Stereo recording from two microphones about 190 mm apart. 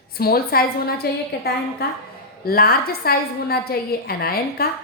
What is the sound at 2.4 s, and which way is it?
A woman's voice, 50° left (ahead or behind).